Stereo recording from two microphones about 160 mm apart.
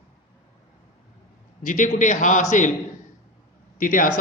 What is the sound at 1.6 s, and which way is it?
A man's voice, 55° left (ahead or behind).